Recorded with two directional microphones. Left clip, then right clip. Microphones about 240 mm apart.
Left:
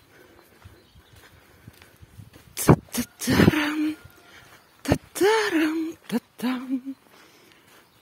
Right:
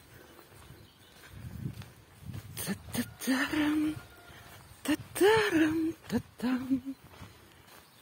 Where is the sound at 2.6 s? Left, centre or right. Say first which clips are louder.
Left 16 dB; left.